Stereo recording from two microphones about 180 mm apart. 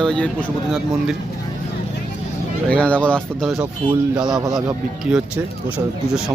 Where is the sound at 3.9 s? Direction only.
25° right (ahead or behind).